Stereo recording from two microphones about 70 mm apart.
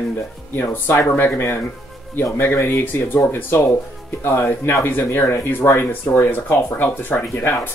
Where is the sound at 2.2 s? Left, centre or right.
Left.